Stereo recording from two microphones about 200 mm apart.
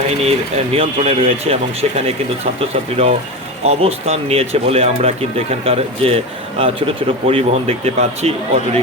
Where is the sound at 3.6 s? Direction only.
30° right (ahead or behind).